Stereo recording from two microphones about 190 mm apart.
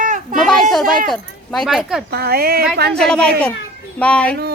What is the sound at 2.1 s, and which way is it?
Speech, 55° right (ahead or behind).